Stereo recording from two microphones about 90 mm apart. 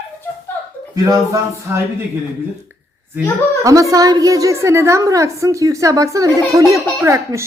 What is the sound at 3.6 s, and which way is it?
A woman's voice, 35° right (ahead or behind).